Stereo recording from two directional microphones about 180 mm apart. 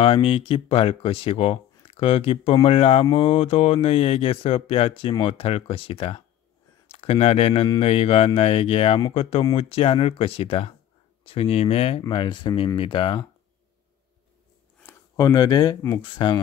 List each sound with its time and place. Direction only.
0.0 s speech: 30° left (ahead or behind)
14.8 s speech: 15° left (ahead or behind)